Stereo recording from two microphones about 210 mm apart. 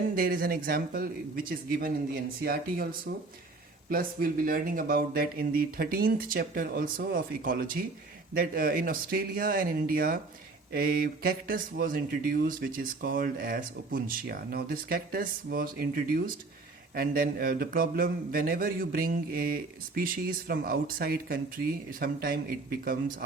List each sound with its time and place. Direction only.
0.2 s speech: 45° right (ahead or behind)